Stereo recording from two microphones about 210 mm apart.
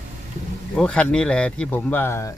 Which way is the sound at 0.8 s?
5° left (ahead or behind).